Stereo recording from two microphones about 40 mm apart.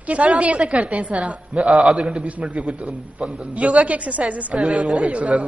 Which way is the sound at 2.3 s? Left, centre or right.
Right.